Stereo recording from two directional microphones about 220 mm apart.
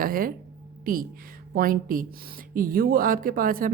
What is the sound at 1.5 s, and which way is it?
Speech, 40° right (ahead or behind).